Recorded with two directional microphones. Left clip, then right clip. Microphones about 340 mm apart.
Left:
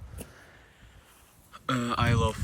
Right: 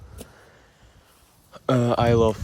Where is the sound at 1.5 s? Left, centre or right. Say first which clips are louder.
Right 8 dB; centre.